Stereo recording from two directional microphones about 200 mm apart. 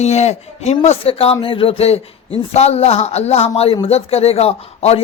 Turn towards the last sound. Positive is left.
turn(degrees=30)  # may be behind; listen again after turning